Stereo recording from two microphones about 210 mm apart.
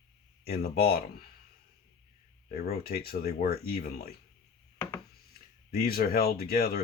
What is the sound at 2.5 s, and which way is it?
Speech, 45° left (ahead or behind).